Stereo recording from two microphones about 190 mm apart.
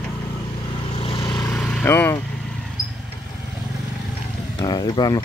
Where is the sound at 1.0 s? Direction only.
25° left (ahead or behind).